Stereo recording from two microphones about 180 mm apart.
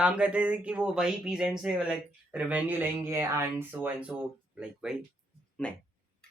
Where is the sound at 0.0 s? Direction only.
5° right (ahead or behind).